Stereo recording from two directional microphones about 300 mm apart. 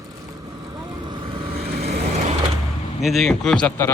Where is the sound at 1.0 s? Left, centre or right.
Centre.